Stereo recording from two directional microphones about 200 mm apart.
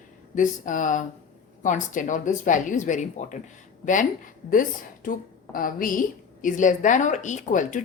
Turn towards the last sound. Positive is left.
turn(degrees=40)  # may be behind; listen again after turning